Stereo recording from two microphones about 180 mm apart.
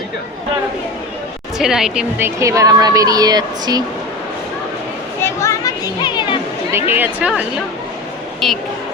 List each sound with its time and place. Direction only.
1.5 s a woman's voice: centre (ahead or behind); by 3.8 s 20° right (ahead or behind)
5.2 s a sound: 15° left (ahead or behind)
6.7 s speech: 15° right (ahead or behind)